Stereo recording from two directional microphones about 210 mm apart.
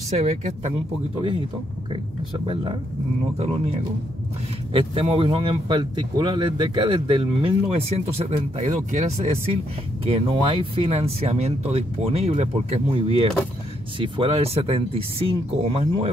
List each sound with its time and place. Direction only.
0.2 s speech: 30° right (ahead or behind)
1.9 s speech: 25° right (ahead or behind)